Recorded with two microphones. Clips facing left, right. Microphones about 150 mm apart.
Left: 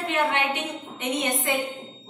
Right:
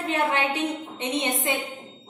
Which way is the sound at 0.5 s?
25° right (ahead or behind).